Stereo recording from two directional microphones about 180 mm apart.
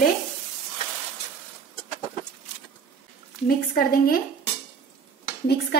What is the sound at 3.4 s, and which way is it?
Speech, 55° left (ahead or behind).